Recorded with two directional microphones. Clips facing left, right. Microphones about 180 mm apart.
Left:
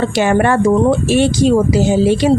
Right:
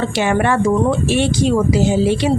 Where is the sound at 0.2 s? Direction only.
45° left (ahead or behind).